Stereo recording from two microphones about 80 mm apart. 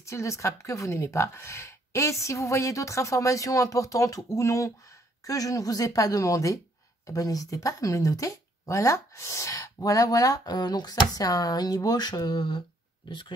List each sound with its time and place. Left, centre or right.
0.0 s a woman's voice: left